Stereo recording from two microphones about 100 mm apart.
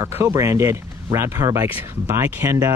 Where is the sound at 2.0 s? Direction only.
25° right (ahead or behind).